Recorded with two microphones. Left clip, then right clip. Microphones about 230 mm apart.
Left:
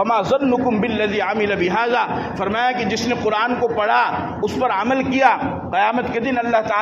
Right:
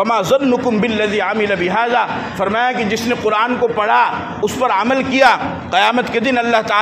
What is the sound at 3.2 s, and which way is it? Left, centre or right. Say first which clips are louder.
A man's voice: right 4 dB; right.